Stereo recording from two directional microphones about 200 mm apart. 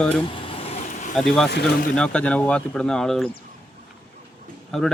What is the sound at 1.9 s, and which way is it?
Speech, 5° left (ahead or behind).